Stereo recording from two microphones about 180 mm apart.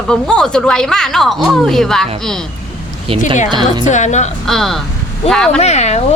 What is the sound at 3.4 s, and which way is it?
Speech, 25° right (ahead or behind).